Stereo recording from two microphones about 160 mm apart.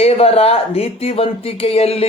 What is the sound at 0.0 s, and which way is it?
Speech, 40° left (ahead or behind).